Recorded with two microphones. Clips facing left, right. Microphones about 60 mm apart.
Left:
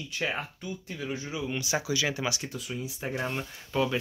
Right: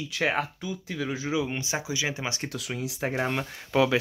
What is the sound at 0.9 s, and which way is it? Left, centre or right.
Speech, right.